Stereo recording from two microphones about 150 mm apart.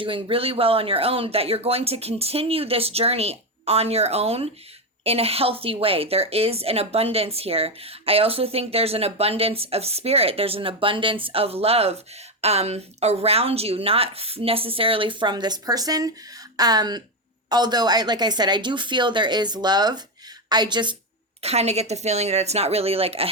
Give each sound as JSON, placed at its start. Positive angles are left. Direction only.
{"t": 0.0, "sound": "a woman's voice", "side_deg": -35}
{"t": 21.4, "sound": "a woman's voice", "side_deg": -45}